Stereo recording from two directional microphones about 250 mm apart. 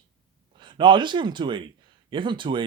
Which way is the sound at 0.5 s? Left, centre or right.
Centre.